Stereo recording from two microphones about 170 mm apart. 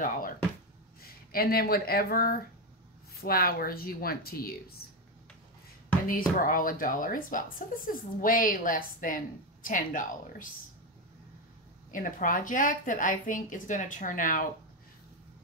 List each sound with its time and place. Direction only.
1.3 s speech: 60° left (ahead or behind)
6.0 s speech: 55° left (ahead or behind)
11.9 s speech: 55° left (ahead or behind)